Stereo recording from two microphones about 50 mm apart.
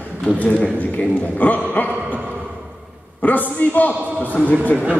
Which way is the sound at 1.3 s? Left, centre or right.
Left.